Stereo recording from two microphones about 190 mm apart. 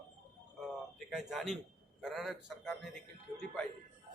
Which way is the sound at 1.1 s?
Centre (ahead or behind).